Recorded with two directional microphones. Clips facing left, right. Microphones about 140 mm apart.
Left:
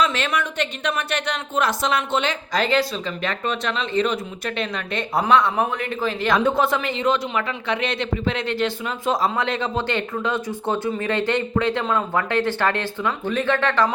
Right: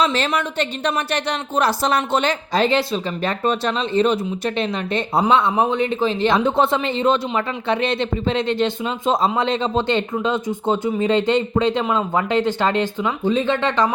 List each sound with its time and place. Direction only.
0.0 s a man's voice: 30° right (ahead or behind)